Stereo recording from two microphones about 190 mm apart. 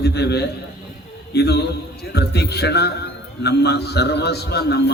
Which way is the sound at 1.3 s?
60° left (ahead or behind).